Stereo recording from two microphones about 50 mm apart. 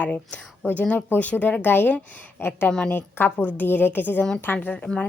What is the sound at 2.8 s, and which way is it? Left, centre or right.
A woman's voice, left.